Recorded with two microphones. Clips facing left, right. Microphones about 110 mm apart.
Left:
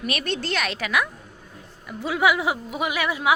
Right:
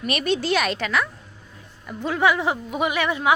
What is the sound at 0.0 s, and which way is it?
A woman's voice, centre (ahead or behind).